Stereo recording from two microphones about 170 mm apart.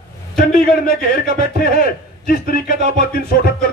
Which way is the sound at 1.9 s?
60° left (ahead or behind).